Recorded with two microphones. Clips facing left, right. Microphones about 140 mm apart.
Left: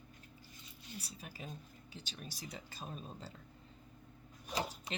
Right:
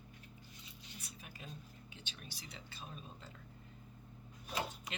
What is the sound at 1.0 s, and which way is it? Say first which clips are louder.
A woman's voice: left 3 dB; 35° left (ahead or behind).